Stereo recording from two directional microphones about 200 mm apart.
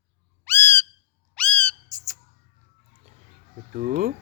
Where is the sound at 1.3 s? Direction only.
5° left (ahead or behind).